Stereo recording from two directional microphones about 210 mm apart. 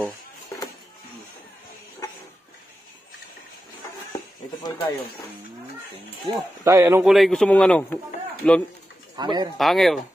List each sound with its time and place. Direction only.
4.6 s speech: 10° left (ahead or behind)
6.2 s speech: 15° right (ahead or behind)
7.1 s a man's voice: centre (ahead or behind)
9.1 s speech: 20° right (ahead or behind)
9.6 s a man's voice: centre (ahead or behind)